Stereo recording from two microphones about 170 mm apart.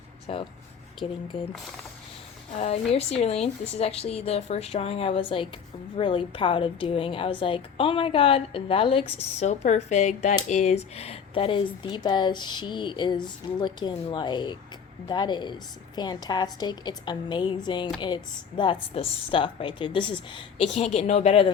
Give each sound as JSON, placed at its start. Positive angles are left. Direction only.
{"t": 0.3, "sound": "a woman's voice", "side_deg": 35}
{"t": 2.6, "sound": "a woman's voice", "side_deg": 35}
{"t": 20.7, "sound": "a woman's voice", "side_deg": 40}